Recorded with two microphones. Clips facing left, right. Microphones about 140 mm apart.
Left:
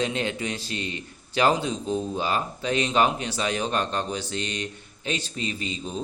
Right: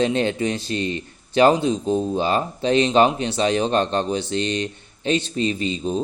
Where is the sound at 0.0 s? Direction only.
30° right (ahead or behind).